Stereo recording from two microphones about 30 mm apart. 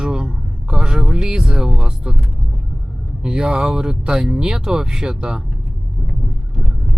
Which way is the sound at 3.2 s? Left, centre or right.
Right.